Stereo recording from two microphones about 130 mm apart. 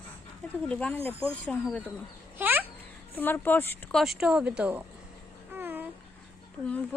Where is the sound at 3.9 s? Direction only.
Centre (ahead or behind).